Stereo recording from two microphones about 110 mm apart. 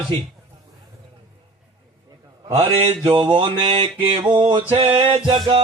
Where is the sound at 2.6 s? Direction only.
60° right (ahead or behind).